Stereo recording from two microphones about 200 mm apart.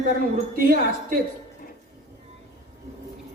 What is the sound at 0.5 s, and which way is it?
Speech, 45° right (ahead or behind).